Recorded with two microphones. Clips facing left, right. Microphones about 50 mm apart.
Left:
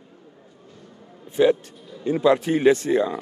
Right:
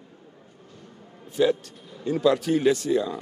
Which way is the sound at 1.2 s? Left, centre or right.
Left.